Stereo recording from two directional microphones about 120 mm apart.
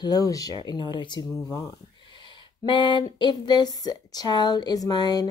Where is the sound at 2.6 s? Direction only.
40° left (ahead or behind).